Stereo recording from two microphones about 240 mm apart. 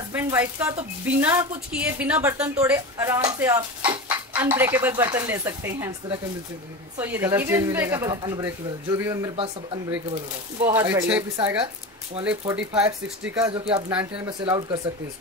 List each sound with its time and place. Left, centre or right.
0.1 s speech: centre
11.6 s speech: right
12.3 s speech: centre
13.8 s speech: centre
14.4 s speech: centre